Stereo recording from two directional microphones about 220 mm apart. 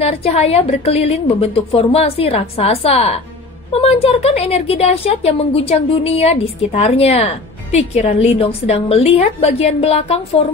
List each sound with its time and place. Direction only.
0.0 s a woman's voice: 30° left (ahead or behind)